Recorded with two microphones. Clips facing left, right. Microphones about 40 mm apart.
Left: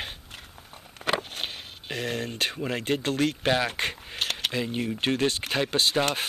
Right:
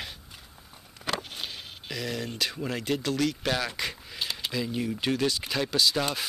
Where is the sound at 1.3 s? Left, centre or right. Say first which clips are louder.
Left 2 dB; left.